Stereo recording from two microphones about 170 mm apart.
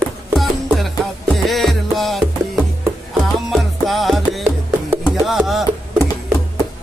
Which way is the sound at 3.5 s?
Centre (ahead or behind).